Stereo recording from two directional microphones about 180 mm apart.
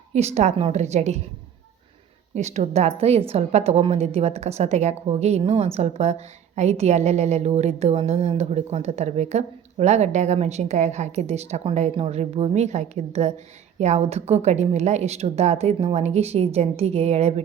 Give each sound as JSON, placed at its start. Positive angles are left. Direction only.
{"t": 0.1, "sound": "a woman's voice", "side_deg": -40}
{"t": 2.3, "sound": "a woman's voice", "side_deg": -40}